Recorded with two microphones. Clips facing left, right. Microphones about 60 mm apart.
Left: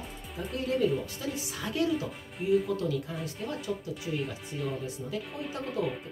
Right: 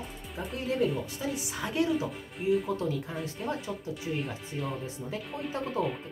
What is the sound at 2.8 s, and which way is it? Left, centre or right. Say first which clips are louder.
Speech: even; right.